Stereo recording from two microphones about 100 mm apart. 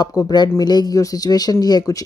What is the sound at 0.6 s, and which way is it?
Mantra, 45° left (ahead or behind).